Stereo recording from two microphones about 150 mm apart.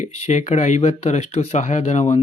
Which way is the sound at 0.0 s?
50° left (ahead or behind).